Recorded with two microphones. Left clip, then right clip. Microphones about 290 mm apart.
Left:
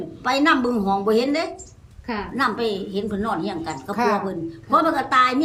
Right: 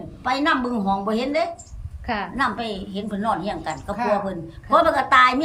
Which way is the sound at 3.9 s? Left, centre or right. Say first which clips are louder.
Left 1 dB; centre.